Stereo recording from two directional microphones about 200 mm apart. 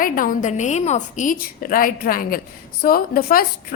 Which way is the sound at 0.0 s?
45° left (ahead or behind).